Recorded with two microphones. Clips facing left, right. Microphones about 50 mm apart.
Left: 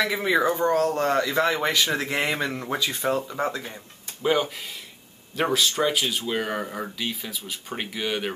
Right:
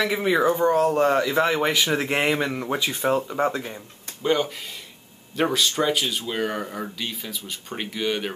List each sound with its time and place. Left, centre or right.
0.0 s speech: centre
2.3 s speech: centre
2.8 s speech: right
4.2 s speech: centre